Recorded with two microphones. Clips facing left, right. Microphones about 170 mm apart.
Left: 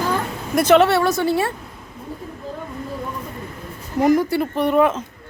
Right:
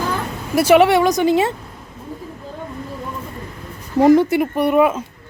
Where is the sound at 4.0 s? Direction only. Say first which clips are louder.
Right 5 dB; 25° right (ahead or behind).